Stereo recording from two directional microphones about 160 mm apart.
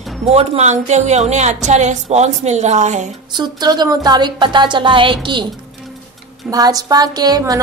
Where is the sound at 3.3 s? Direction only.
25° right (ahead or behind).